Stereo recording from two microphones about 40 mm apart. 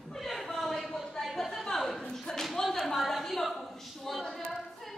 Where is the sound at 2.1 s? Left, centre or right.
Centre.